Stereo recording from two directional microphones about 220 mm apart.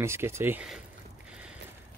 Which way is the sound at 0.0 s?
10° right (ahead or behind).